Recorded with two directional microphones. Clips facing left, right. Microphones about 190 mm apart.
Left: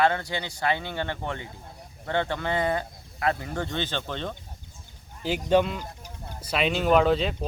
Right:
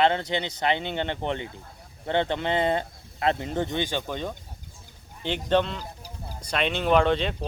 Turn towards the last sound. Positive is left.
turn(degrees=0)  # may be behind; listen again after turning